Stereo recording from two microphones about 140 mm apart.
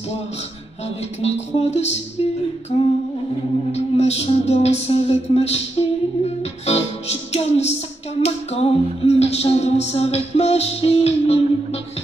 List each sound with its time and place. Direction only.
0.8 s music: 50° left (ahead or behind)
3.7 s music: 50° left (ahead or behind)